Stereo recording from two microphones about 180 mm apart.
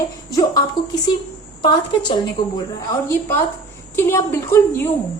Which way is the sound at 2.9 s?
15° left (ahead or behind).